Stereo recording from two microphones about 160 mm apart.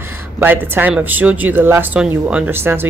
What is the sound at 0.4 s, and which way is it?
Speech, 15° right (ahead or behind).